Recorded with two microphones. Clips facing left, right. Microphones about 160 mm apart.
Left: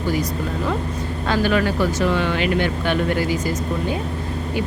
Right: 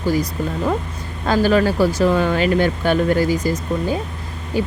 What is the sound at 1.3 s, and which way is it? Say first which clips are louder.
Speech: right 4 dB; 35° right (ahead or behind).